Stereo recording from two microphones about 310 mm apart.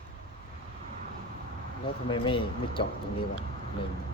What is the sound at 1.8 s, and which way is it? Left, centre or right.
Speech, centre.